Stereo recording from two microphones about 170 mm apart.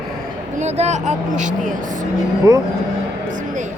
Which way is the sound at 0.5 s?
40° right (ahead or behind).